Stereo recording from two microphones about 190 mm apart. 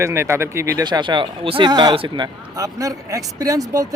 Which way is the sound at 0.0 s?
15° right (ahead or behind).